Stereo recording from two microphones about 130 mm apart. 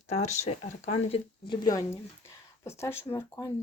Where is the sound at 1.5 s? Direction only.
30° left (ahead or behind).